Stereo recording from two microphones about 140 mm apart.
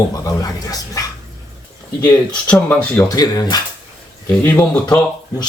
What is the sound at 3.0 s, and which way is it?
Speech, 25° left (ahead or behind).